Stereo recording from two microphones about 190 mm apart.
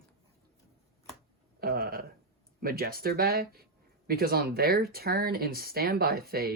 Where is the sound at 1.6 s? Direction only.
50° right (ahead or behind).